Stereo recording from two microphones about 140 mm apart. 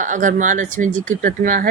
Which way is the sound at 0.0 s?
65° right (ahead or behind).